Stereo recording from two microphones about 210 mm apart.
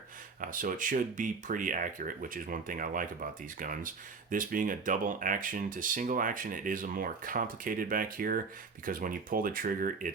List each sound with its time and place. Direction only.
0.4 s speech: 40° right (ahead or behind)